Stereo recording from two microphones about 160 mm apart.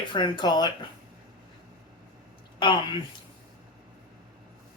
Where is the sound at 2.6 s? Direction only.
30° left (ahead or behind).